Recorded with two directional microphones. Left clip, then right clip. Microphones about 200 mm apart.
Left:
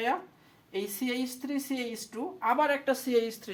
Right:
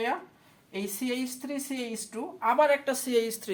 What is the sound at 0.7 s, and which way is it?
Speech, 20° right (ahead or behind).